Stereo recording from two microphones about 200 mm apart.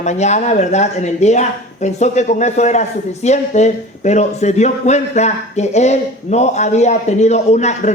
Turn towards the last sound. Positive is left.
turn(degrees=35)  # may be behind; listen again after turning